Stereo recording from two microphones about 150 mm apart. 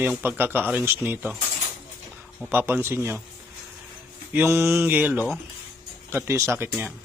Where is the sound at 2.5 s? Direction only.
15° right (ahead or behind).